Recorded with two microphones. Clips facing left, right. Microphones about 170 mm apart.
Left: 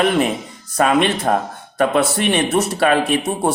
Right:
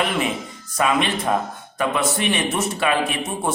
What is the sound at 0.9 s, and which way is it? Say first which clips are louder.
Speech: left 4 dB; 65° left (ahead or behind).